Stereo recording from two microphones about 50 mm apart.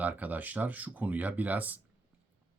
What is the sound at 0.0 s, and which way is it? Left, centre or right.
Speech, right.